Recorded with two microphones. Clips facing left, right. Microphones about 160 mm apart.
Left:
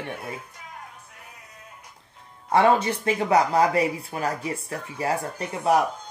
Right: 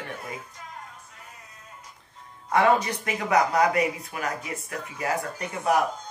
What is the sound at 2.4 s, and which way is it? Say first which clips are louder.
Speech: left 2 dB; 30° left (ahead or behind).